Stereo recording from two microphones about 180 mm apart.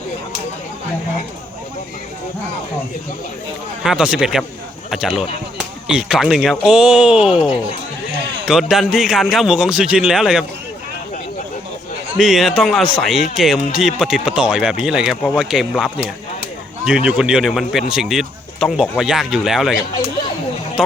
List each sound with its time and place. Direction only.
3.8 s speech: 5° right (ahead or behind)
12.1 s speech: centre (ahead or behind)
20.8 s speech: 5° right (ahead or behind)